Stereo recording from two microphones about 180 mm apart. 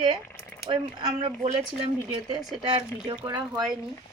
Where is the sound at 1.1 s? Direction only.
40° right (ahead or behind).